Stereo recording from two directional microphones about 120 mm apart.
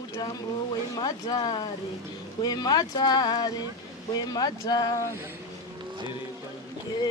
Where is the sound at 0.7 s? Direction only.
35° left (ahead or behind).